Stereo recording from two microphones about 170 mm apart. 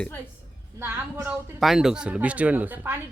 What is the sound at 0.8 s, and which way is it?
Speech, 10° right (ahead or behind).